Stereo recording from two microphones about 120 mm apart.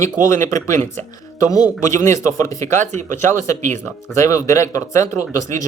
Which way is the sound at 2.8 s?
85° right.